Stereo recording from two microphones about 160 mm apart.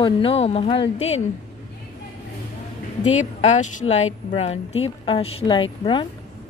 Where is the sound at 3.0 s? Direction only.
45° left (ahead or behind); by 6.0 s 30° left (ahead or behind).